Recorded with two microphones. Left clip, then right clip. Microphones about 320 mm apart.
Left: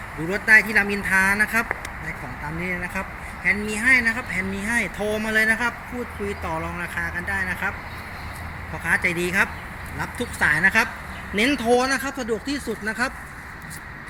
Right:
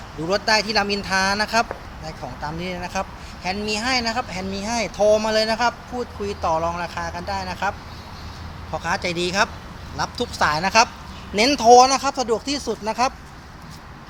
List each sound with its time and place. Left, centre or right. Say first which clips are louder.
0.3 s speech: left 3 dB; centre
8.8 s speech: left 2 dB; centre